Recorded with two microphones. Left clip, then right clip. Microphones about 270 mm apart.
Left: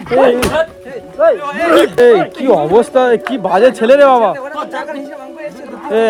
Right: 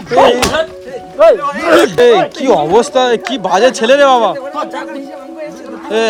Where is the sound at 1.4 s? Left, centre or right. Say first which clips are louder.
Right 1 dB; centre.